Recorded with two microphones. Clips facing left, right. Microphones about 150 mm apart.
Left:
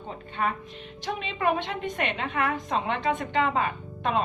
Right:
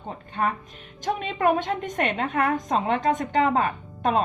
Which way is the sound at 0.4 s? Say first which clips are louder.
Right 2 dB; 40° right (ahead or behind).